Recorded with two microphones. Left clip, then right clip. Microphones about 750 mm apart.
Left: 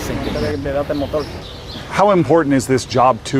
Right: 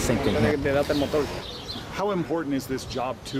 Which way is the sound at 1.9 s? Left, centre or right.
Left.